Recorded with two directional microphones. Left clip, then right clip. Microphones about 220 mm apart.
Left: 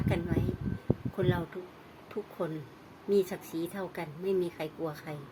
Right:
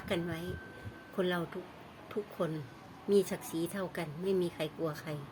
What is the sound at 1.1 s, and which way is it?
Speech, 5° right (ahead or behind).